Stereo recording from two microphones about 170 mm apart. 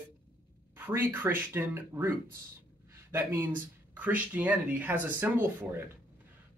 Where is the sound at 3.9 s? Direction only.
10° right (ahead or behind).